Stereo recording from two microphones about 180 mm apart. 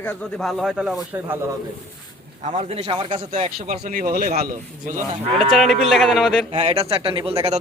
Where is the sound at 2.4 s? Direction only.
40° right (ahead or behind).